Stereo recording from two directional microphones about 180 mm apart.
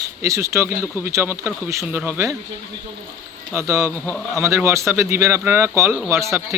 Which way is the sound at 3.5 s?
15° right (ahead or behind).